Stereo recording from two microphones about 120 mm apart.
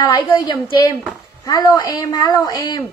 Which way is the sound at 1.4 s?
30° left (ahead or behind).